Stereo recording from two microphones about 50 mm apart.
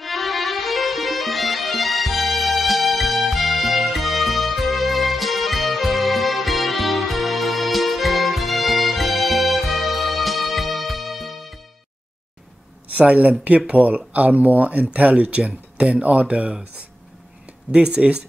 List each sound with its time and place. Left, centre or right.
0.0 s music: centre
12.9 s speech: right
17.6 s speech: centre